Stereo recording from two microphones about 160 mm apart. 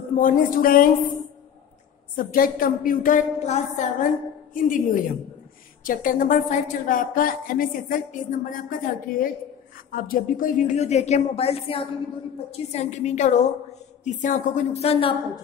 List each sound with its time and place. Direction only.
0.1 s a woman's voice: 55° left (ahead or behind)
2.1 s a woman's voice: 60° left (ahead or behind); by 15.4 s 35° left (ahead or behind)